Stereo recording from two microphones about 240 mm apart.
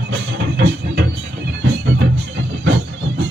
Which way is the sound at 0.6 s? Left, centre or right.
Right.